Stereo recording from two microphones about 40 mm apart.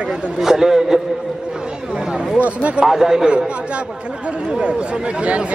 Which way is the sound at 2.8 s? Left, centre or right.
Centre.